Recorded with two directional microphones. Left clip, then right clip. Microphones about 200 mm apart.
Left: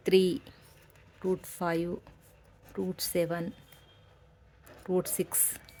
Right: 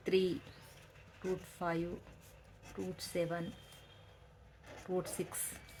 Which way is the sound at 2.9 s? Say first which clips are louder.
Left 7 dB; 50° left (ahead or behind).